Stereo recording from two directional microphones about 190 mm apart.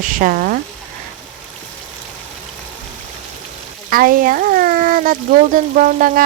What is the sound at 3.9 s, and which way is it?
Speech, 50° right (ahead or behind).